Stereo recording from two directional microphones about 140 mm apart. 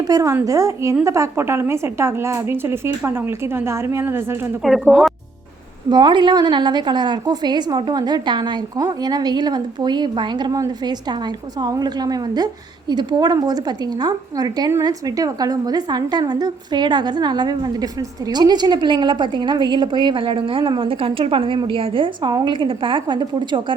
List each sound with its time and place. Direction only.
0.1 s a woman's voice: 25° right (ahead or behind); by 5.1 s 5° right (ahead or behind)
5.9 s a woman's voice: 30° right (ahead or behind)